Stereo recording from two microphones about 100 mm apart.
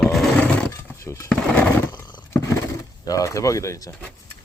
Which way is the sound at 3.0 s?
35° left (ahead or behind).